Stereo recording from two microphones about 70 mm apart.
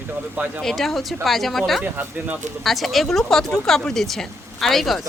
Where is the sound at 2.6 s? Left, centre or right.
Centre.